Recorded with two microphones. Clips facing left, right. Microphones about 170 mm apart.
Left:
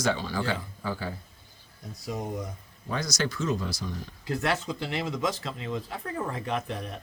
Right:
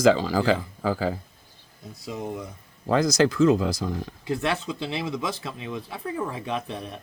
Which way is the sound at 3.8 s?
90° right.